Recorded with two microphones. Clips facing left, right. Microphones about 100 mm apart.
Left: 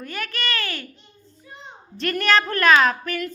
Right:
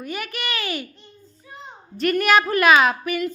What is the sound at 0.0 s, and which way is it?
Speech, 15° right (ahead or behind).